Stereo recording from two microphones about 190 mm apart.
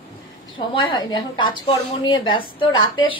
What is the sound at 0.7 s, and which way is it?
A woman's voice, 25° left (ahead or behind).